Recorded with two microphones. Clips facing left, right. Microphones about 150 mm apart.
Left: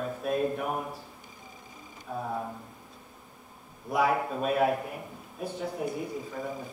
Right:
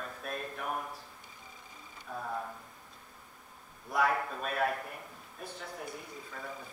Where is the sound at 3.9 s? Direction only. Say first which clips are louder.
Left 4 dB; 5° left (ahead or behind).